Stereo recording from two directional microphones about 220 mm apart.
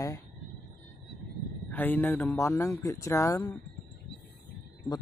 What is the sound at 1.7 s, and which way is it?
Speech, 10° left (ahead or behind).